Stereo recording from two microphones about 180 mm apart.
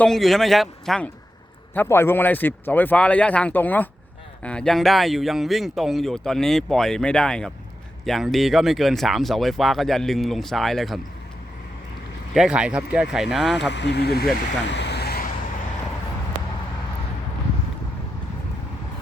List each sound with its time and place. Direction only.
0.0 s speech: centre (ahead or behind)
12.3 s speech: 5° right (ahead or behind)
13.7 s speech: 70° left (ahead or behind)
14.7 s vehicle: 70° left (ahead or behind)